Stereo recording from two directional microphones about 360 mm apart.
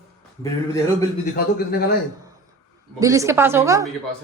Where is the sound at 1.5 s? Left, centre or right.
Left.